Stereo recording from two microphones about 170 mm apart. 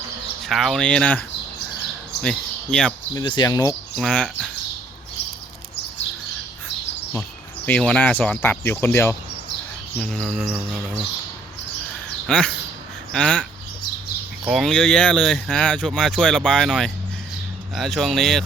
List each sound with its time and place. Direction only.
0.4 s speech: centre (ahead or behind)
2.2 s speech: 5° left (ahead or behind)
3.2 s speech: 25° left (ahead or behind)
3.9 s speech: 5° left (ahead or behind)
7.2 s speech: 5° left (ahead or behind)
10.0 s speech: 5° left (ahead or behind)
12.2 s speech: 5° left (ahead or behind)
14.4 s speech: centre (ahead or behind)